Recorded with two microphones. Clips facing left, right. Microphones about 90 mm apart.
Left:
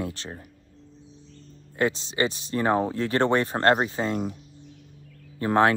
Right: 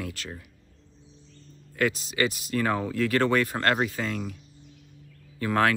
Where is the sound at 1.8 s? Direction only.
30° left (ahead or behind).